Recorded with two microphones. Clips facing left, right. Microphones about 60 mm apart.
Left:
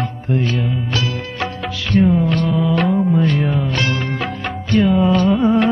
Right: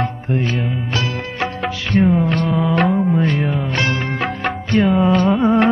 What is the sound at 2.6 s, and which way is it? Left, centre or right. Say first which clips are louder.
Music: right 1 dB; right.